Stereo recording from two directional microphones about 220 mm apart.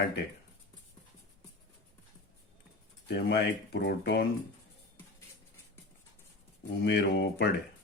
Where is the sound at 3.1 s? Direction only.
50° left (ahead or behind).